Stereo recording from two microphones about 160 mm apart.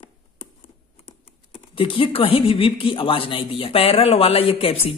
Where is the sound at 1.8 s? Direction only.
35° left (ahead or behind).